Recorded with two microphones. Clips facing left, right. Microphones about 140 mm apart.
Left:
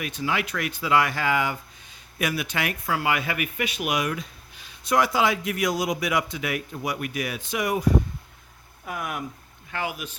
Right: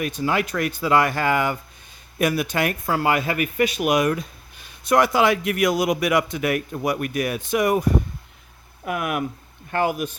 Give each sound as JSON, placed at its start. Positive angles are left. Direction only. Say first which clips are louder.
{"t": 0.0, "sound": "speech", "louder": "right 5 dB", "side_deg": -45}
{"t": 8.8, "sound": "speech", "louder": "right 7 dB", "side_deg": -70}
{"t": 9.7, "sound": "speech", "louder": "right 9 dB", "side_deg": -50}